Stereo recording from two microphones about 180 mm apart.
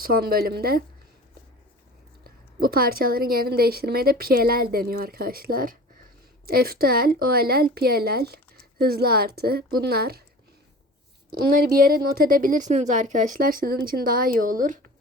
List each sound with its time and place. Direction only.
0.0 s speech: 55° right (ahead or behind)
2.2 s speech: 55° right (ahead or behind)
11.3 s a woman's voice: 55° right (ahead or behind)